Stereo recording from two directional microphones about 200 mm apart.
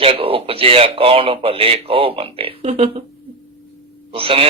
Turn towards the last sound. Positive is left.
turn(degrees=-30)  # may be behind; listen again after turning